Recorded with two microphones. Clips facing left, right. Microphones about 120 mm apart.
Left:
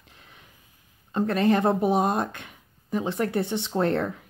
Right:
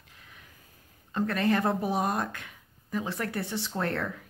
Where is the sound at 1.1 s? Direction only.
20° left (ahead or behind).